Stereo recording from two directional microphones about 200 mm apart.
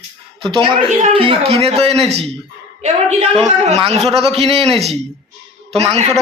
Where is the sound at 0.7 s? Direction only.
30° right (ahead or behind).